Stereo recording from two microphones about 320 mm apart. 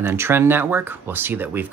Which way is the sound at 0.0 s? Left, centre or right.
Centre.